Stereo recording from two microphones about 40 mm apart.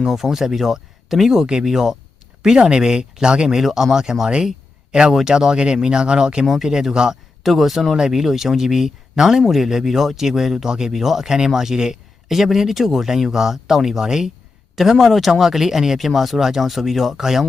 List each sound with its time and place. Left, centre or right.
0.0 s speech: centre
3.6 s speech: centre
3.9 s speech: centre
7.4 s speech: centre